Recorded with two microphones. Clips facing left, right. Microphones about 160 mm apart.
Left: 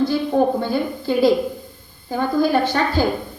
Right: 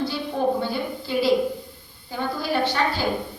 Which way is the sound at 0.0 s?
45° left (ahead or behind).